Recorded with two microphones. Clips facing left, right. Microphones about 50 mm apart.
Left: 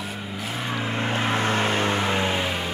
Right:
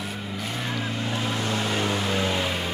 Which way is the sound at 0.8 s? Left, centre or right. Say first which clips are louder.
Left 3 dB; left.